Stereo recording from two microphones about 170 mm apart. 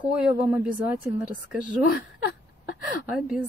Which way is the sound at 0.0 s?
10° right (ahead or behind).